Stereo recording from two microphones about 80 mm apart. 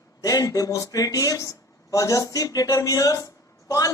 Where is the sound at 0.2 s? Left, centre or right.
Left.